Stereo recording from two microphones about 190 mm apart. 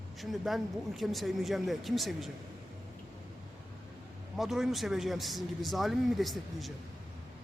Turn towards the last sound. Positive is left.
turn(degrees=0)  # may be behind; listen again after turning